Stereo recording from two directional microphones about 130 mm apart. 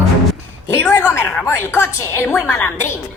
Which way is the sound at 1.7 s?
15° left (ahead or behind).